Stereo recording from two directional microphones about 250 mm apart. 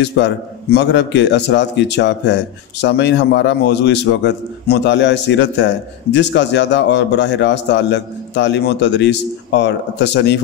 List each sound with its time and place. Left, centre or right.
0.0 s a man's voice: left